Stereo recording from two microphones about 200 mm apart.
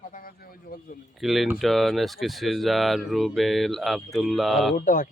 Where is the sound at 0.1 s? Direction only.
45° left (ahead or behind).